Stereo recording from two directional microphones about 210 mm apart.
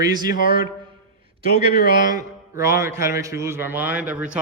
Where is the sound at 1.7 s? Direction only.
40° left (ahead or behind).